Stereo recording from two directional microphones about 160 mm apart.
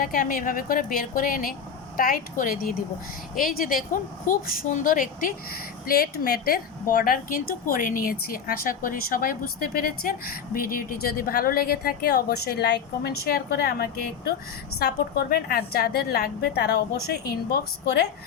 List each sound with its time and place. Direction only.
0.0 s speech: 60° left (ahead or behind)
5.9 s speech: 70° left (ahead or behind)